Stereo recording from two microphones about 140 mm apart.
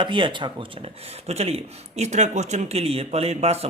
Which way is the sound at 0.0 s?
35° right (ahead or behind).